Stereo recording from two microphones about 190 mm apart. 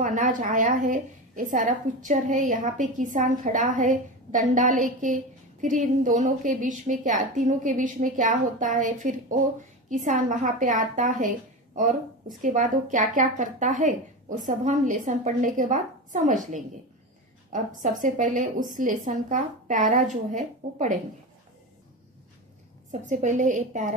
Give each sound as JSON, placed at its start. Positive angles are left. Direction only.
{"t": 0.0, "sound": "a woman's voice", "side_deg": -40}
{"t": 17.8, "sound": "a woman's voice", "side_deg": -45}
{"t": 22.8, "sound": "a woman's voice", "side_deg": -40}